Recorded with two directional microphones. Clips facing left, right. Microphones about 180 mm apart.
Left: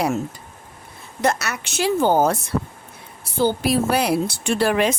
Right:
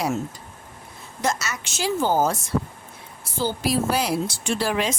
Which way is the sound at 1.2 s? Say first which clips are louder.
Left 4 dB; 60° left (ahead or behind).